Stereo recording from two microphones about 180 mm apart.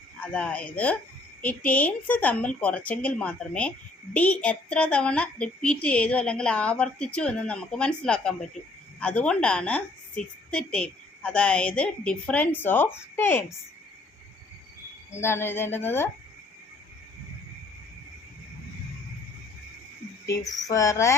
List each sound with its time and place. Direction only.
0.2 s a woman's voice: 5° left (ahead or behind)
15.1 s a woman's voice: 15° left (ahead or behind)
20.2 s a woman's voice: 20° left (ahead or behind)